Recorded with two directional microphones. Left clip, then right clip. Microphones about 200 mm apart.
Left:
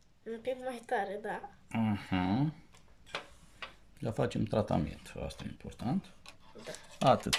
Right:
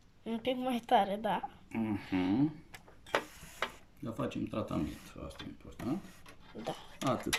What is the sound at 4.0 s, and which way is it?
Speech, 50° left (ahead or behind).